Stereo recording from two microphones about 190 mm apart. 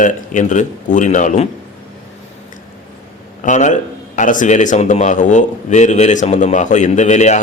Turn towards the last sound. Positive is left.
turn(degrees=35)  # may be behind; listen again after turning